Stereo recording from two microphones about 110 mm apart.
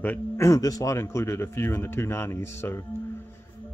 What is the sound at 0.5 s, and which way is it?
Speech, 35° left (ahead or behind).